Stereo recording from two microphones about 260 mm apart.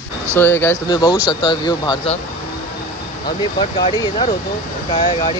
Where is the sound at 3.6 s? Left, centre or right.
Centre.